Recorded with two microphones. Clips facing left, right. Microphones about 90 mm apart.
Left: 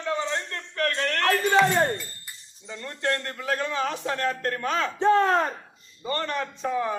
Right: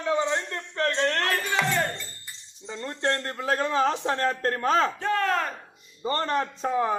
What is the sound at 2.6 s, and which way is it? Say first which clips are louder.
A man's voice: right 1 dB; 30° right (ahead or behind).